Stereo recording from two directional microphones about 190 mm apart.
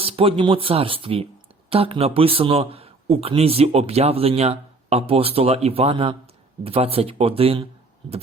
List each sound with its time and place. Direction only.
0.0 s a man's voice: 30° right (ahead or behind)